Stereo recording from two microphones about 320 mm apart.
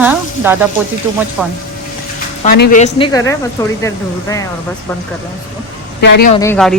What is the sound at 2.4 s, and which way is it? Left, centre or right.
Speech, left.